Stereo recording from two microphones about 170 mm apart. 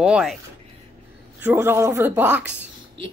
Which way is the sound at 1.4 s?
15° right (ahead or behind).